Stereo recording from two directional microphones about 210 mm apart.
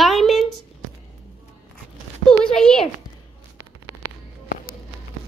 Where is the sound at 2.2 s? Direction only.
5° left (ahead or behind).